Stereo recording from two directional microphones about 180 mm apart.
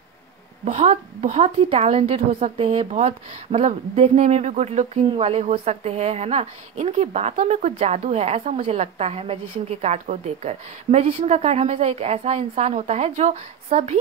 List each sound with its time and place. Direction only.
0.7 s a woman's voice: 40° right (ahead or behind)